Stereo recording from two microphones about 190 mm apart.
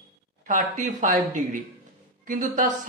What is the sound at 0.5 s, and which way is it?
Speech, 45° right (ahead or behind).